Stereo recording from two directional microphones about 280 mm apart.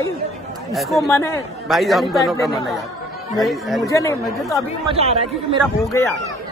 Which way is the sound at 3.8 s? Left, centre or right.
Centre.